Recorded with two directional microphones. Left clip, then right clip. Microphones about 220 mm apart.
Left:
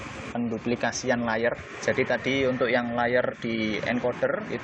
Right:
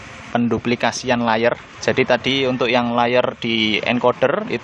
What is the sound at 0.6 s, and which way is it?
Speech, 25° right (ahead or behind).